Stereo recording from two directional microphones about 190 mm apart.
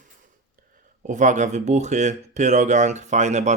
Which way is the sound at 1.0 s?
40° right (ahead or behind).